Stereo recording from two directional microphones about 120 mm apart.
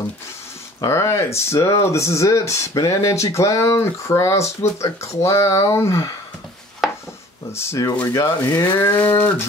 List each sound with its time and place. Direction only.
0.7 s speech: 25° left (ahead or behind)
6.8 s chopping: 5° right (ahead or behind)
7.5 s speech: 25° left (ahead or behind)